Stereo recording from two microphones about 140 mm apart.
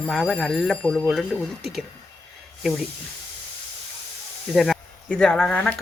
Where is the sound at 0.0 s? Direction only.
Centre (ahead or behind).